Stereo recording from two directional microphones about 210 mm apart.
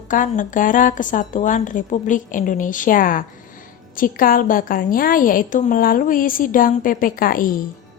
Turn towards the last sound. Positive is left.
turn(degrees=40)  # may be behind; listen again after turning